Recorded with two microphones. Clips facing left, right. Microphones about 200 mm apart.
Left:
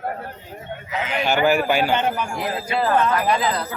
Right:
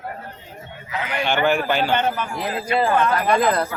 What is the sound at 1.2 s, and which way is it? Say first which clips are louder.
Speech: left 1 dB; 5° left (ahead or behind).